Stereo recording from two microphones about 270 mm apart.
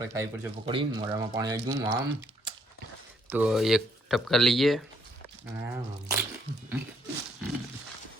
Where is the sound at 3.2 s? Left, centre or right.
Centre.